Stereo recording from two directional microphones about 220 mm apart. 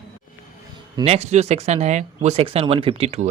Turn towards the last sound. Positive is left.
turn(degrees=-30)  # may be behind; listen again after turning